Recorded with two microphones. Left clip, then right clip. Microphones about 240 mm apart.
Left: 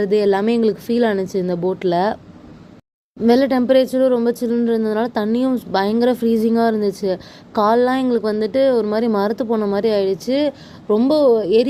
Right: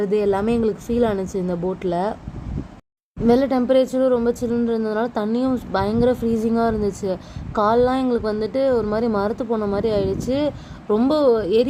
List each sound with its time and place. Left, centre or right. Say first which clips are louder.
0.0 s a woman's voice: left 4 dB; left
3.2 s a woman's voice: left 3 dB; left